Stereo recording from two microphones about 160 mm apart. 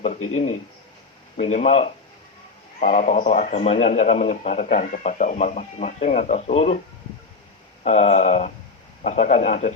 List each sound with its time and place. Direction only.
0.0 s a man's voice: 45° left (ahead or behind)
7.9 s a man's voice: 45° left (ahead or behind)